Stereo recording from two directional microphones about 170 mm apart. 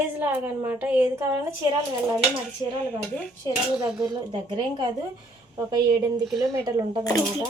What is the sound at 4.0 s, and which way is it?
A woman's voice, 25° right (ahead or behind).